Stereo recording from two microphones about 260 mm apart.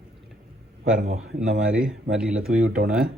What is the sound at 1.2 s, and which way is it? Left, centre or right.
A man's voice, centre.